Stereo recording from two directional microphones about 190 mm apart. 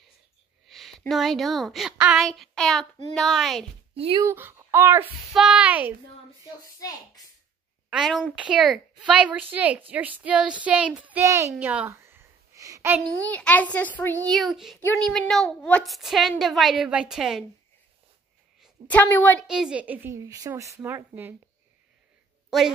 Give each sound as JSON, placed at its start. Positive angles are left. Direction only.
{"t": 0.7, "sound": "speech", "side_deg": 0}
{"t": 3.9, "sound": "speech", "side_deg": -30}
{"t": 4.2, "sound": "a woman's voice", "side_deg": -10}
{"t": 7.9, "sound": "a woman's voice", "side_deg": 0}
{"t": 11.5, "sound": "a sound", "side_deg": -5}
{"t": 13.1, "sound": "a child's voice", "side_deg": 10}
{"t": 18.9, "sound": "a child's voice", "side_deg": 10}
{"t": 19.4, "sound": "a woman's voice", "side_deg": -5}